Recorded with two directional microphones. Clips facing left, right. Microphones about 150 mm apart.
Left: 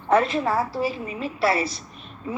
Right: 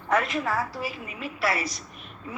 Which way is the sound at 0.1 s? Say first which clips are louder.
Left 5 dB; 30° left (ahead or behind).